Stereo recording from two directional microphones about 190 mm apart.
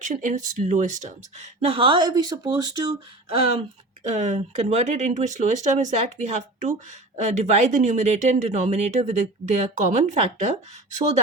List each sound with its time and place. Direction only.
0.0 s speech: 40° right (ahead or behind)